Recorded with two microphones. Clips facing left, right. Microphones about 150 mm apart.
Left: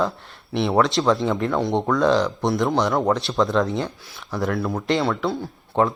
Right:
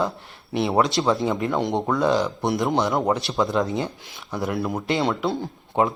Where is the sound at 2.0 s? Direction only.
5° right (ahead or behind).